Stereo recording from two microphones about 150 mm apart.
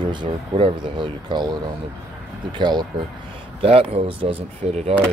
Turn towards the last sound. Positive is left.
turn(degrees=-40)  # may be behind; listen again after turning